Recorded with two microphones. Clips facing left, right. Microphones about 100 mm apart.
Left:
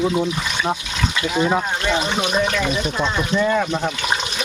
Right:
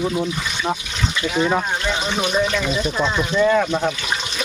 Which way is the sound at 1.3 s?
10° left (ahead or behind).